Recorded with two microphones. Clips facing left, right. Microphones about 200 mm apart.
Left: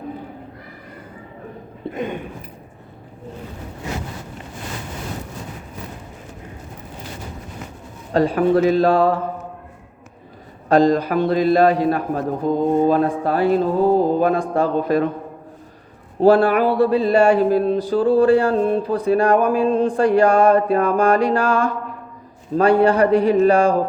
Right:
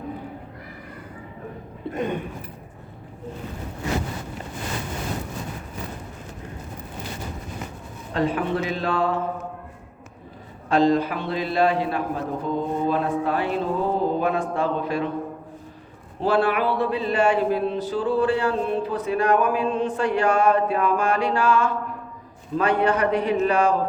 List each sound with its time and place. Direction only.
8.1 s a man's voice: 35° left (ahead or behind)
10.7 s a man's voice: 40° left (ahead or behind)
16.2 s a man's voice: 45° left (ahead or behind)
20.0 s a man's voice: 45° left (ahead or behind)
22.8 s a man's voice: 30° left (ahead or behind)